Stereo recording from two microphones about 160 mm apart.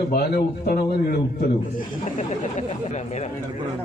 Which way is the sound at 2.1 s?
45° left (ahead or behind).